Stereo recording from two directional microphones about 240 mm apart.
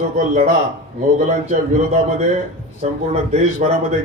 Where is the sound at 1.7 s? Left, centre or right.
Right.